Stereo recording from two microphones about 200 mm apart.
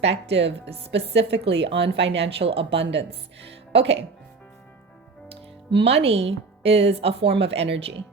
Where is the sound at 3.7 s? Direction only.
60° right (ahead or behind).